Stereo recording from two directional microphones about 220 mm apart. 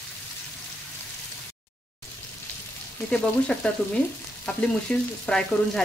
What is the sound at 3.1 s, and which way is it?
Frying, 5° left (ahead or behind).